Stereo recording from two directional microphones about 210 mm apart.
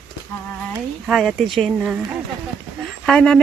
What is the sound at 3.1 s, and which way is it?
Speech, 5° left (ahead or behind).